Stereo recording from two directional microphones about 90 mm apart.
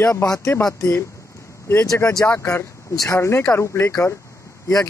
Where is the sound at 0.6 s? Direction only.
35° left (ahead or behind).